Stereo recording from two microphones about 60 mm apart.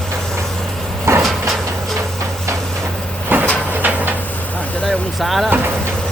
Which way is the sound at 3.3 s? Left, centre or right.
Right.